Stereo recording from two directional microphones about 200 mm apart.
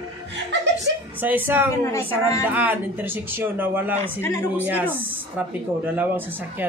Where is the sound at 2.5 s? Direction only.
10° right (ahead or behind).